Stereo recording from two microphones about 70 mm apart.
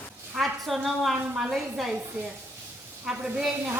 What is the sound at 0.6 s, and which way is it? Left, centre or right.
Speech, centre.